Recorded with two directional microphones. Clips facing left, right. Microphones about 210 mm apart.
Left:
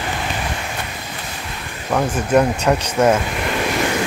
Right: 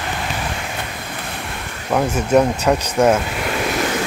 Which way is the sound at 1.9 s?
5° right (ahead or behind).